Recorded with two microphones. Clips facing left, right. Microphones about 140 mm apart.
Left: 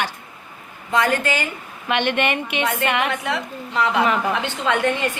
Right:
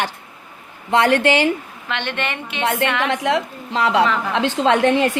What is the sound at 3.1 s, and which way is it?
A woman's voice, 90° right.